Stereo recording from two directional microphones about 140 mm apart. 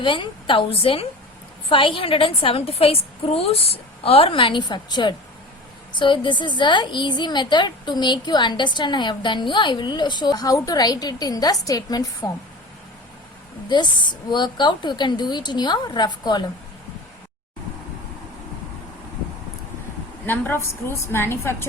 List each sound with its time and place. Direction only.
0.0 s a woman's voice: 35° left (ahead or behind)
13.7 s a woman's voice: 35° left (ahead or behind)
20.2 s a woman's voice: 15° left (ahead or behind)